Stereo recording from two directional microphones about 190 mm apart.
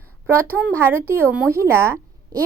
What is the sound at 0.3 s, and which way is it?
A woman's voice, 10° right (ahead or behind).